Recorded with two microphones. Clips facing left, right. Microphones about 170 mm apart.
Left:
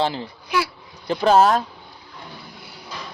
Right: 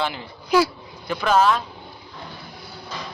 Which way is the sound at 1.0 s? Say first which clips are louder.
Left 3 dB; 35° left (ahead or behind).